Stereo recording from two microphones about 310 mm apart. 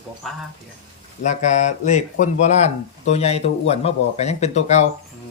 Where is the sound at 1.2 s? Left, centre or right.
Left.